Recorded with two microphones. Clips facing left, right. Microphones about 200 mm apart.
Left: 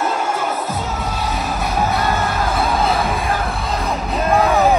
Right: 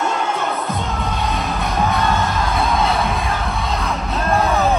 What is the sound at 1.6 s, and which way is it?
Music, 30° left (ahead or behind).